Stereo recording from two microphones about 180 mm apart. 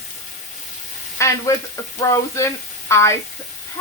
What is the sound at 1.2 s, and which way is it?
Speech, 15° left (ahead or behind).